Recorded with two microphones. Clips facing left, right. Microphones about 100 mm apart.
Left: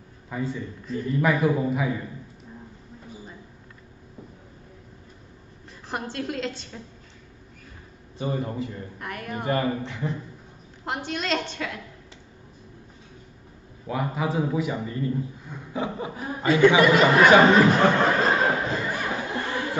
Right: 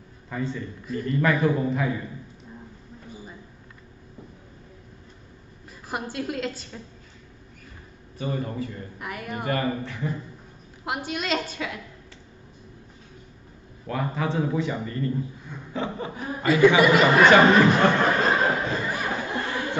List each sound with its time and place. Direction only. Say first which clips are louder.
0.3 s a man's voice: even; 5° left (ahead or behind)
5.9 s a woman's voice: even; 5° right (ahead or behind)
8.2 s speech: left 1 dB; 20° left (ahead or behind)
8.9 s a woman's voice: even; 5° right (ahead or behind)
9.5 s speech: left 2 dB; 25° left (ahead or behind)
10.9 s a woman's voice: even; 5° right (ahead or behind)
13.8 s a man's voice: even; 10° left (ahead or behind)
16.6 s a woman's voice: even; 5° right (ahead or behind)
17.2 s a sound: even; 5° left (ahead or behind)